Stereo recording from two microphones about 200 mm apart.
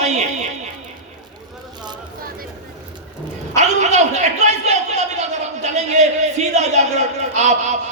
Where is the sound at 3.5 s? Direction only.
35° right (ahead or behind).